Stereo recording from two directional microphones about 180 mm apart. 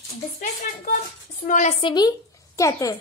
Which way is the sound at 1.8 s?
25° left (ahead or behind).